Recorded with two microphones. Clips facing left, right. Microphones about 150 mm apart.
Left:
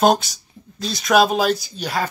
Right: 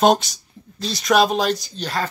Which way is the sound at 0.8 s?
Centre (ahead or behind).